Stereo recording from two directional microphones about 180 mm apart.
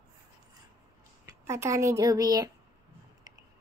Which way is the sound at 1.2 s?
15° right (ahead or behind).